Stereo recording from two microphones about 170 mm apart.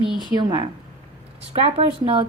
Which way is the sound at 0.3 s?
25° right (ahead or behind).